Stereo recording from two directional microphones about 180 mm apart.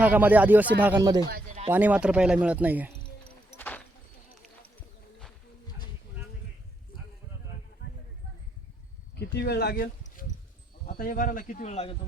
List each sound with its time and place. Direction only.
0.0 s speech: 10° right (ahead or behind)
0.9 s speech: 25° right (ahead or behind)
1.7 s speech: 10° right (ahead or behind)
3.6 s a sound: 10° left (ahead or behind)
9.1 s speech: 65° left (ahead or behind); by 11.9 s 35° left (ahead or behind)